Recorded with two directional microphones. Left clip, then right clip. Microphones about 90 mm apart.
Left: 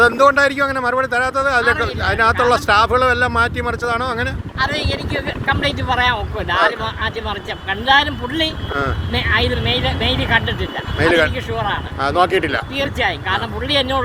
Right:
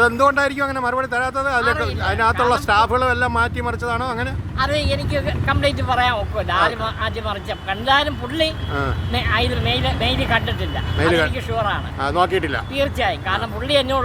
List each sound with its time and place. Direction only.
0.0 s speech: 20° right (ahead or behind)
4.5 s speech: 50° right (ahead or behind)
11.0 s speech: 15° right (ahead or behind)
12.7 s speech: 50° right (ahead or behind)